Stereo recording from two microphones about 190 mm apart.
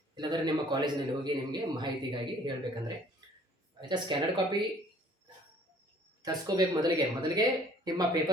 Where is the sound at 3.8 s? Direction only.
25° right (ahead or behind).